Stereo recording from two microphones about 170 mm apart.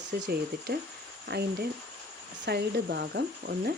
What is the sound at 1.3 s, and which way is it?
Speech, 75° right (ahead or behind).